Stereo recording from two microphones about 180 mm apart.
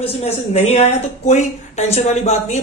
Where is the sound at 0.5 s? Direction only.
35° left (ahead or behind).